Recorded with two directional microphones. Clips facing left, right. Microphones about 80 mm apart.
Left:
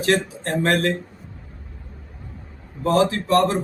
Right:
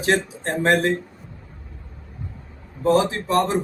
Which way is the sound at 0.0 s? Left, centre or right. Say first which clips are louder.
Even; right.